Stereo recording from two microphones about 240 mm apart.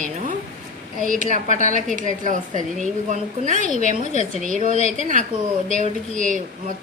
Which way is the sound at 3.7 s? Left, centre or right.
Left.